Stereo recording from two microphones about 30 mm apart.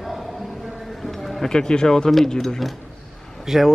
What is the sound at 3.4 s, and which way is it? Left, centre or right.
Speech, centre.